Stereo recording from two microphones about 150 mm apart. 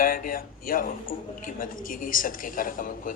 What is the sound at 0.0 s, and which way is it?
A woman's voice, 70° left (ahead or behind).